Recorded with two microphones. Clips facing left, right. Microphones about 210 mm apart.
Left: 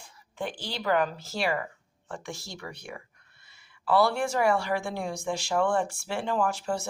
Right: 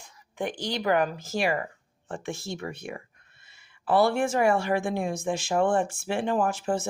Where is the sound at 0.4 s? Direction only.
20° right (ahead or behind).